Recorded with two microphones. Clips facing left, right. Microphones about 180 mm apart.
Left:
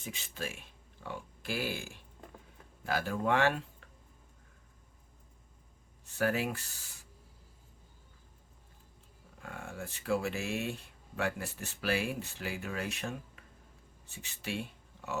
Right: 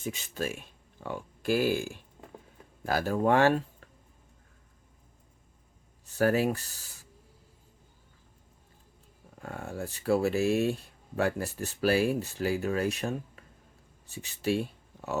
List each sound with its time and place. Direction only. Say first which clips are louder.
0.0 s speech: right 7 dB; 40° right (ahead or behind)
6.1 s speech: right 6 dB; 40° right (ahead or behind)
9.4 s speech: right 6 dB; 40° right (ahead or behind)